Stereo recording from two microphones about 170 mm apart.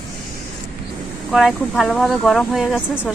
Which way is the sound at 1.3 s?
5° right (ahead or behind).